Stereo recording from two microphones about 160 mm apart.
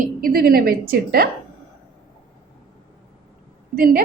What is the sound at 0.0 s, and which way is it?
A woman's voice, 65° right (ahead or behind).